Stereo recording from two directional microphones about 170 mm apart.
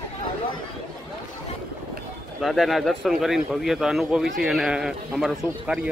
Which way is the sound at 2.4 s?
Centre (ahead or behind).